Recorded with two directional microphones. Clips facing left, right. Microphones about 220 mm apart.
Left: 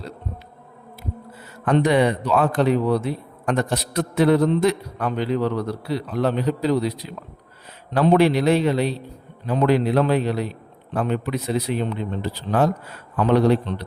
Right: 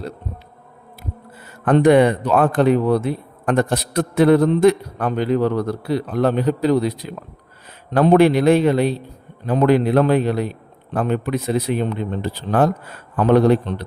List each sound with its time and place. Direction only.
1.6 s speech: 55° right (ahead or behind)